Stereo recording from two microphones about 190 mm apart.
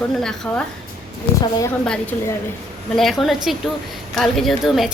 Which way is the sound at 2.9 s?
Centre (ahead or behind).